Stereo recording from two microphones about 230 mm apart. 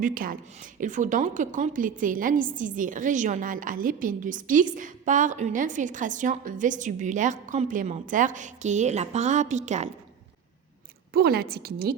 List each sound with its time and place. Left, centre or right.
0.0 s a woman's voice: right
11.1 s a woman's voice: right